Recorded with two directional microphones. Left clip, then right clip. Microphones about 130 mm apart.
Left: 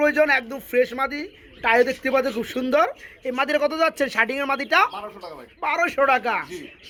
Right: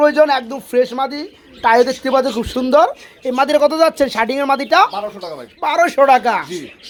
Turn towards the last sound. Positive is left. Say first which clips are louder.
# right 8 dB
turn(degrees=-15)  # may be behind; listen again after turning